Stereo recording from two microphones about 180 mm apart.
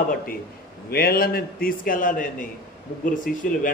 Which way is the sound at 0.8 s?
60° left (ahead or behind).